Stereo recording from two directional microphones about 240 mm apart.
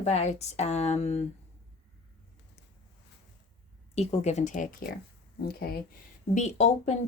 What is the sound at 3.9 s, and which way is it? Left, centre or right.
Speech, left.